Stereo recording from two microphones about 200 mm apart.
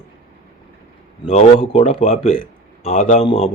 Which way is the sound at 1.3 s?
30° left (ahead or behind).